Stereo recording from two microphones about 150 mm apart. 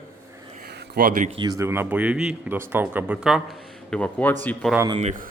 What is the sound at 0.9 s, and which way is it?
Speech, 75° right (ahead or behind).